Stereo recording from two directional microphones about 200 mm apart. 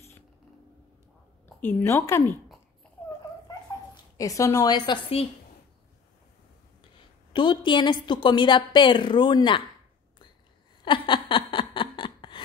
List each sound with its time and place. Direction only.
1.6 s a woman's voice: 10° left (ahead or behind)
4.2 s a woman's voice: 15° left (ahead or behind)
7.3 s a woman's voice: 25° left (ahead or behind)
10.8 s a sound: 25° left (ahead or behind)